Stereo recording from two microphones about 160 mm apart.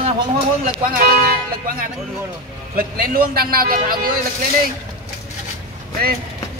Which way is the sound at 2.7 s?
65° right (ahead or behind).